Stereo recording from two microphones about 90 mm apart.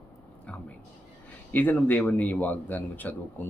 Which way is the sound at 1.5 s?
20° left (ahead or behind).